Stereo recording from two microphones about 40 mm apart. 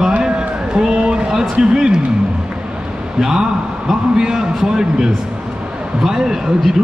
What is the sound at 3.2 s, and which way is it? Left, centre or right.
A man's voice, centre.